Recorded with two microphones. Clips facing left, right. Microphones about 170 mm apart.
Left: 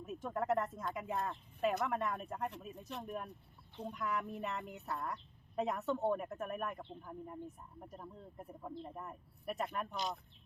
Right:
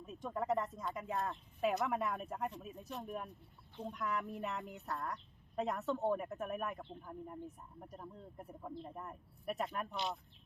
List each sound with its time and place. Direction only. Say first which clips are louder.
0.0 s speech: left 2 dB; 5° left (ahead or behind)